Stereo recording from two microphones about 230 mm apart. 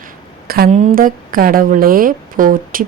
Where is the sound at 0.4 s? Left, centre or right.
Right.